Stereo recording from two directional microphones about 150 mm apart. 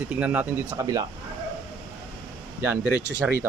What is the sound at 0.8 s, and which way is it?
Speech, 25° right (ahead or behind).